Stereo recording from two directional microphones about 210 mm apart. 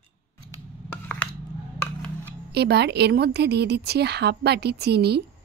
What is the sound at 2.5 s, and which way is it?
A woman's voice, 50° right (ahead or behind).